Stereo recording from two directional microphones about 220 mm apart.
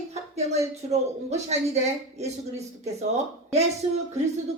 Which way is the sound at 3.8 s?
25° right (ahead or behind).